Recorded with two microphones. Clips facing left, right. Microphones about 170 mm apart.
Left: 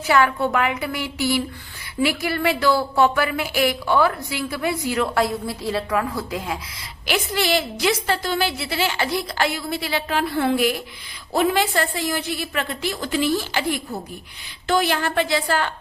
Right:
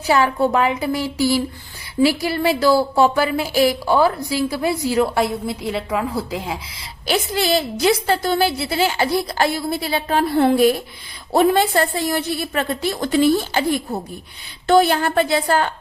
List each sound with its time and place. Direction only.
0.0 s a woman's voice: 35° right (ahead or behind)
7.1 s a woman's voice: 35° right (ahead or behind)